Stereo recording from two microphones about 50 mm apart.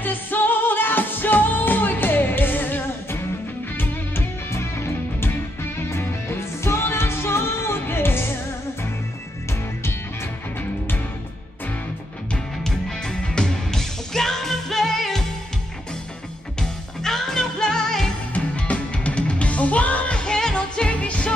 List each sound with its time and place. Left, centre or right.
0.0 s music: left
4.5 s music: left
12.6 s music: centre
16.5 s music: centre
18.3 s music: left